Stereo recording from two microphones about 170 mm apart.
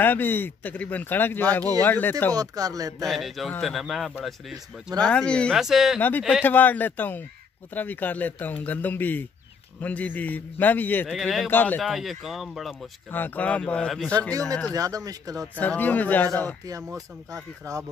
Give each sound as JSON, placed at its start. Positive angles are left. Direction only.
{"t": 0.0, "sound": "speech", "side_deg": 10}
{"t": 2.3, "sound": "speech", "side_deg": -20}
{"t": 3.1, "sound": "speech", "side_deg": 0}
{"t": 5.9, "sound": "speech", "side_deg": 10}
{"t": 11.1, "sound": "speech", "side_deg": 0}
{"t": 11.5, "sound": "speech", "side_deg": 10}
{"t": 11.8, "sound": "speech", "side_deg": 0}
{"t": 13.1, "sound": "speech", "side_deg": 10}
{"t": 14.7, "sound": "speech", "side_deg": -20}
{"t": 15.6, "sound": "speech", "side_deg": 10}
{"t": 16.6, "sound": "speech", "side_deg": -20}